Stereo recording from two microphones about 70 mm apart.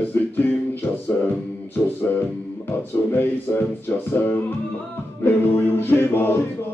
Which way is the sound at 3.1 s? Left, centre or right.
Left.